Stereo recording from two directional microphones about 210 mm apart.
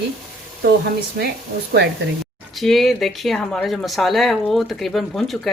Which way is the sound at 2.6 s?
Centre (ahead or behind).